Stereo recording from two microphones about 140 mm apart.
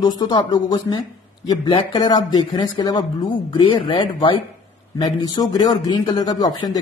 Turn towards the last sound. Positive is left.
turn(degrees=30)  # may be behind; listen again after turning